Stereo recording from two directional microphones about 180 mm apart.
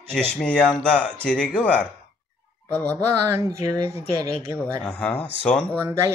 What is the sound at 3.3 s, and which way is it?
Speech, 20° right (ahead or behind).